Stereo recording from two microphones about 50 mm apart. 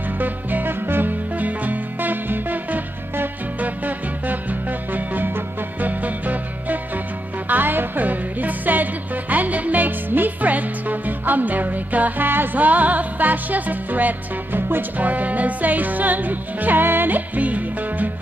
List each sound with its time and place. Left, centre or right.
0.2 s music: right
1.3 s music: right